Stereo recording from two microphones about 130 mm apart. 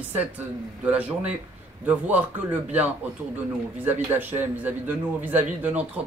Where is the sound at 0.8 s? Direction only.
10° right (ahead or behind).